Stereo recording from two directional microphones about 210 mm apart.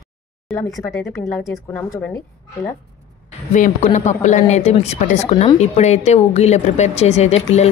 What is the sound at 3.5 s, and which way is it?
Speech, 35° left (ahead or behind).